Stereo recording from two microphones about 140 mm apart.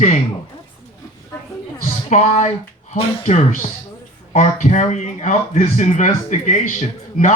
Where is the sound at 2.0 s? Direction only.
55° left (ahead or behind).